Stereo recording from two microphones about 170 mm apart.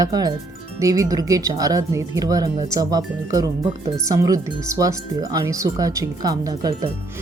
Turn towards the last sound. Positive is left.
turn(degrees=-20)  # may be behind; listen again after turning